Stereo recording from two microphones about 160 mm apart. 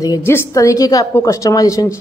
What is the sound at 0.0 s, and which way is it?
A woman's voice, 20° left (ahead or behind).